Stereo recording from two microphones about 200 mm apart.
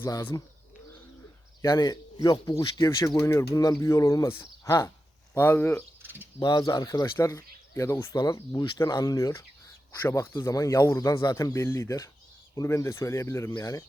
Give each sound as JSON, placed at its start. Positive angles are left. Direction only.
{"t": 0.0, "sound": "speech", "side_deg": 10}
{"t": 1.6, "sound": "speech", "side_deg": 20}
{"t": 6.0, "sound": "bird", "side_deg": -10}
{"t": 6.4, "sound": "speech", "side_deg": 20}